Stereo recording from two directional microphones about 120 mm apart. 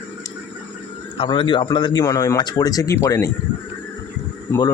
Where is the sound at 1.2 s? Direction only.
45° left (ahead or behind); by 3.3 s 25° left (ahead or behind).